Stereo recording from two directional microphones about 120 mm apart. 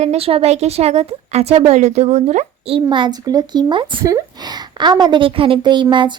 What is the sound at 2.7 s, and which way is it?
A woman's voice, 40° right (ahead or behind).